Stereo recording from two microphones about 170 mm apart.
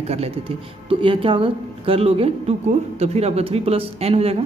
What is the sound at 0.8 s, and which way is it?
A woman's voice, 30° right (ahead or behind).